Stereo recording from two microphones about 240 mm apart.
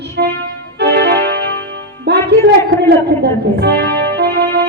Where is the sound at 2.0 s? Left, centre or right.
Right.